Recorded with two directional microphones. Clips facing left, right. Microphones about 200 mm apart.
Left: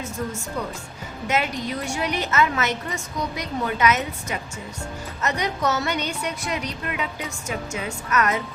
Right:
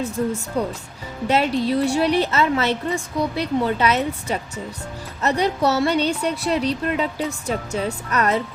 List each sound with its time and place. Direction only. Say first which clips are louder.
0.6 s a woman's voice: right 6 dB; 35° right (ahead or behind)